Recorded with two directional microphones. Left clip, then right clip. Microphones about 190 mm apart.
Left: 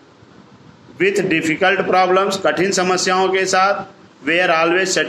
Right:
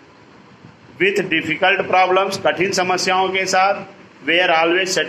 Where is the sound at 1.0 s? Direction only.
35° left (ahead or behind).